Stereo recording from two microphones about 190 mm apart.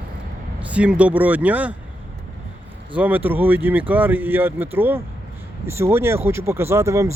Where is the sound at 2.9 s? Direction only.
10° right (ahead or behind).